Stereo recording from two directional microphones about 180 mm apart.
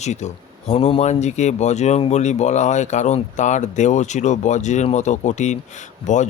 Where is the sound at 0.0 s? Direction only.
40° left (ahead or behind).